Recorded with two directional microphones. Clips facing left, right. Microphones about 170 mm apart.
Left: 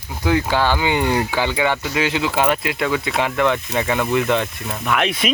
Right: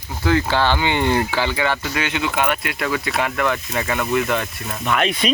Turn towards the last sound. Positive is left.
turn(degrees=0)  # may be behind; listen again after turning